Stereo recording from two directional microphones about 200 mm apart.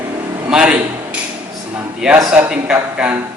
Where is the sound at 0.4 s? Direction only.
5° right (ahead or behind).